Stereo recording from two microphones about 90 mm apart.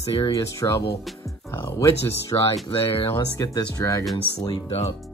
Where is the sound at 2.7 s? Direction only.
90° left.